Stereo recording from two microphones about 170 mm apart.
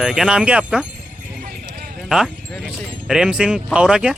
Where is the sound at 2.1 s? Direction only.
5° right (ahead or behind).